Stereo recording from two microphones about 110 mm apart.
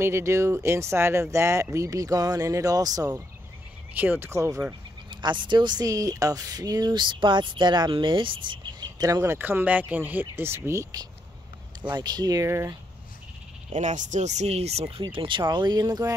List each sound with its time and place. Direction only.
0.0 s speech: 25° right (ahead or behind)
3.9 s speech: 15° right (ahead or behind)
5.1 s a woman's voice: 45° right (ahead or behind)
9.3 s speech: 20° right (ahead or behind)
13.7 s speech: 90° right; by 16.1 s 35° right (ahead or behind)